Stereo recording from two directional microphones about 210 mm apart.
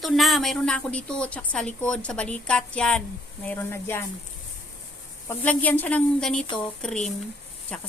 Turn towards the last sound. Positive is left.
turn(degrees=5)  # may be behind; listen again after turning